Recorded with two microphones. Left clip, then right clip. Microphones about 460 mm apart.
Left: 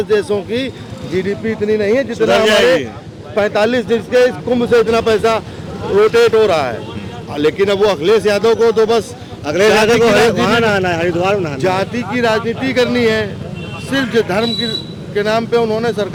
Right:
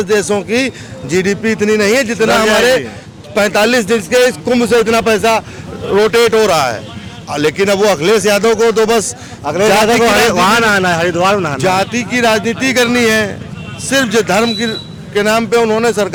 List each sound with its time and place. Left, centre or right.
0.0 s speech: right
9.4 s a man's voice: right
10.1 s speech: right